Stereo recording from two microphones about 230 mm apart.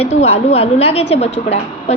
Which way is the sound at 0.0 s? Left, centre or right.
Left.